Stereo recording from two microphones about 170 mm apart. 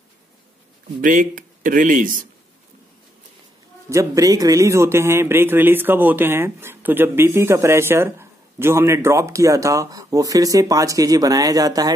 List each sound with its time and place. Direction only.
1.0 s speech: 55° right (ahead or behind)
3.9 s speech: 20° right (ahead or behind)